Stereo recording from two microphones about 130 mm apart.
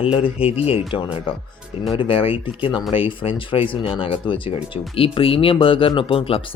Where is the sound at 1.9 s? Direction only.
40° left (ahead or behind).